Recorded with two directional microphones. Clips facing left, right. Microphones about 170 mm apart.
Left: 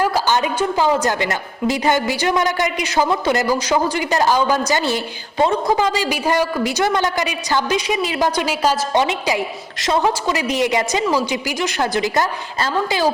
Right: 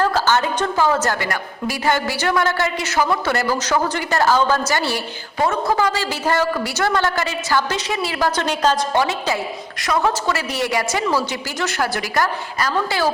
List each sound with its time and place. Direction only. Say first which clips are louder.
0.0 s a woman's voice: even; 15° left (ahead or behind)